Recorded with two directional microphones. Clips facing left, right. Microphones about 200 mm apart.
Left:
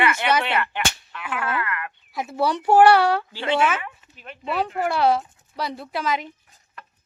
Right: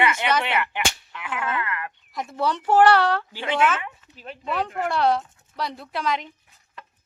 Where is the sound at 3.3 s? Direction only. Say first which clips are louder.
Left 3 dB; 15° right (ahead or behind).